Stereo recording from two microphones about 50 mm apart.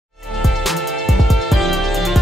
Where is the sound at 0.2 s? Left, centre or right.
Centre.